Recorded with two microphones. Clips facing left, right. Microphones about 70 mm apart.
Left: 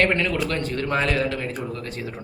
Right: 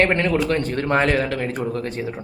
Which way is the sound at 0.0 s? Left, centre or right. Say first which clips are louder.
Right 3 dB; right.